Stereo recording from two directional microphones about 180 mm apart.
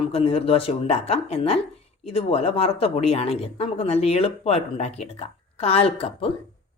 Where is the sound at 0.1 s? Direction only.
35° left (ahead or behind).